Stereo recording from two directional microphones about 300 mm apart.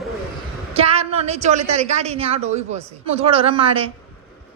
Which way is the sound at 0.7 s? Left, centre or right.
Centre.